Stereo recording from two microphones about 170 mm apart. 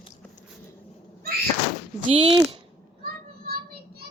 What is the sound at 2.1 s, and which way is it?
Speech, 30° right (ahead or behind).